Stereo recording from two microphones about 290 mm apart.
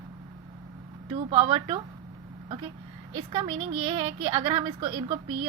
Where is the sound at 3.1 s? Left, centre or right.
Centre.